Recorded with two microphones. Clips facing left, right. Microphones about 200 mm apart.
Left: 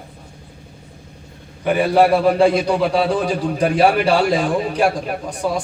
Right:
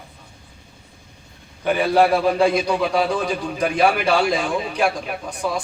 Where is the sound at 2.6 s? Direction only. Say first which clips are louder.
Left 3 dB; 55° left (ahead or behind).